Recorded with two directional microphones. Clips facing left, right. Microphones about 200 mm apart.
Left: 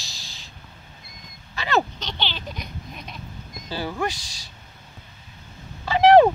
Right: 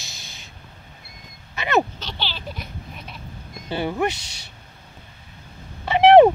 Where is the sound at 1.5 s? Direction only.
20° right (ahead or behind).